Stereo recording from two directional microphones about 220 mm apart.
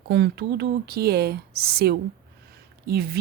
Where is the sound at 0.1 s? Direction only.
45° right (ahead or behind).